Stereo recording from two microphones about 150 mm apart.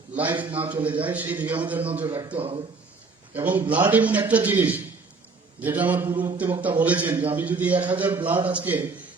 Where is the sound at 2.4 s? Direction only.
40° right (ahead or behind).